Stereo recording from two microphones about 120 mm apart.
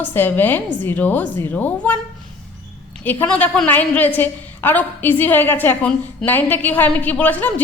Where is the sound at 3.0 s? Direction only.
15° left (ahead or behind).